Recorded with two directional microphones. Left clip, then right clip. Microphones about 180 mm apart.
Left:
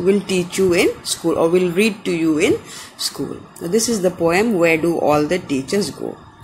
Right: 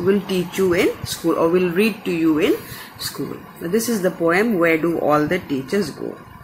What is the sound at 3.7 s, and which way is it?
Speech, 20° left (ahead or behind).